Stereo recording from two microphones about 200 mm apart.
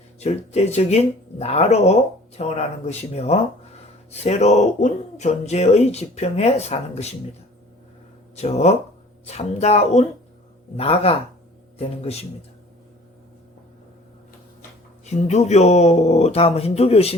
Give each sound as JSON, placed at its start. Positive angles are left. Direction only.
{"t": 0.2, "sound": "speech", "side_deg": 30}
{"t": 8.4, "sound": "speech", "side_deg": 35}
{"t": 15.0, "sound": "speech", "side_deg": 35}